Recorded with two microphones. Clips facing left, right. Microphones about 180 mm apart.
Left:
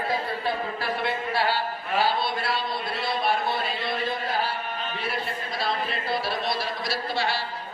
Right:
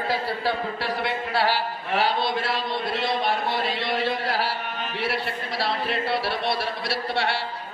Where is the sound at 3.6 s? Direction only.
80° right.